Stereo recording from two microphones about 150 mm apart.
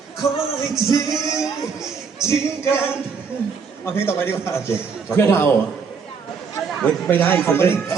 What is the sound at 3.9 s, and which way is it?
A man's voice, 15° left (ahead or behind).